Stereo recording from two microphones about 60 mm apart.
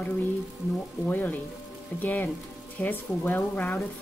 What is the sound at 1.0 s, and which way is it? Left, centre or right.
Speech, left.